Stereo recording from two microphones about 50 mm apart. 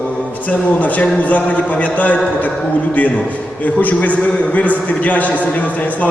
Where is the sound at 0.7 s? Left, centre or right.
Left.